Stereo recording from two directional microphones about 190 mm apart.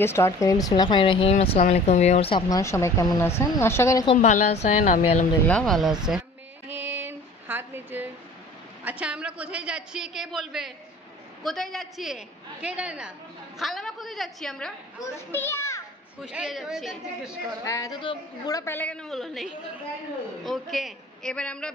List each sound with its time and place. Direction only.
0.0 s a woman's voice: 15° left (ahead or behind); by 2.4 s 30° left (ahead or behind)
2.5 s a woman's voice: 15° left (ahead or behind)
4.0 s a woman's voice: 35° left (ahead or behind)
5.5 s a woman's voice: 5° left (ahead or behind)
6.7 s female singing: 10° right (ahead or behind)
8.8 s a woman's voice: 5° right (ahead or behind)
15.0 s a woman's voice: 20° left (ahead or behind)
16.2 s a woman's voice: 5° right (ahead or behind)
17.6 s a woman's voice: 15° left (ahead or behind)